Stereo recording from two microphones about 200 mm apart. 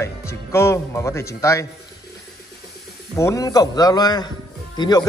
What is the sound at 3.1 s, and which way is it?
A man's voice, 15° left (ahead or behind).